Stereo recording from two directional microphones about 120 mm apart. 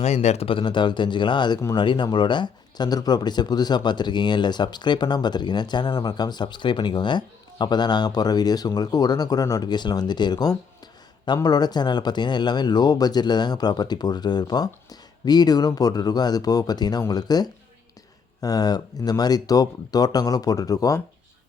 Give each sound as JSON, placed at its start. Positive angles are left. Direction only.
{"t": 0.0, "sound": "speech", "side_deg": 65}